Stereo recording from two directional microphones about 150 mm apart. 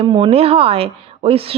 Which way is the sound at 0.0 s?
35° right (ahead or behind).